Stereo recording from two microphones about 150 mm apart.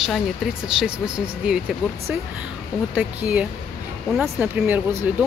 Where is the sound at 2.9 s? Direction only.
10° right (ahead or behind).